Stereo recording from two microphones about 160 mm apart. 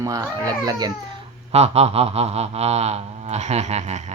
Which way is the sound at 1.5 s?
40° right (ahead or behind).